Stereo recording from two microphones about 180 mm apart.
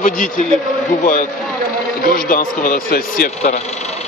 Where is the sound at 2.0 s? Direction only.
50° left (ahead or behind).